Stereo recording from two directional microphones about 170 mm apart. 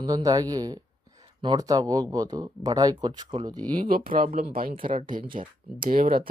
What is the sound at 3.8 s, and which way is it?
Speech, 55° right (ahead or behind).